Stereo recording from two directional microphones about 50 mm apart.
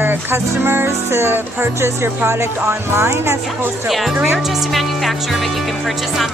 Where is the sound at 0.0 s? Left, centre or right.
Right.